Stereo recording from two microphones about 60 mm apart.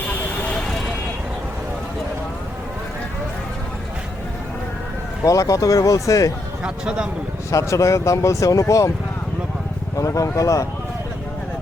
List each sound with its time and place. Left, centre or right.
0.1 s vehicle: left
5.2 s speech: left
6.8 s a man's voice: centre
7.5 s speech: left
10.0 s speech: left